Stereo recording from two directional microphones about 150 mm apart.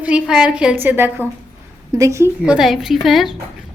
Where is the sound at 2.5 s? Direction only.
Centre (ahead or behind).